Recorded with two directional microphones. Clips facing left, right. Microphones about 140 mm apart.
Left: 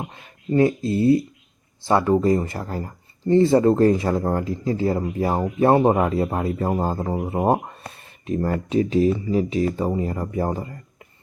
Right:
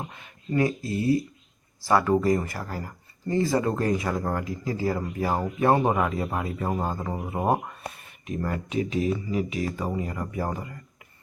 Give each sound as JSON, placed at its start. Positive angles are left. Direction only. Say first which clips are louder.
{"t": 0.0, "sound": "speech", "louder": "left 4 dB", "side_deg": 30}